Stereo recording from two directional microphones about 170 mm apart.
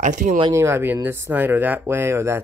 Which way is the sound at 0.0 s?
50° right (ahead or behind).